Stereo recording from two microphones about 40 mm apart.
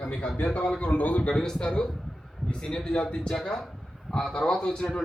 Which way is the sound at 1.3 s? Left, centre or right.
Centre.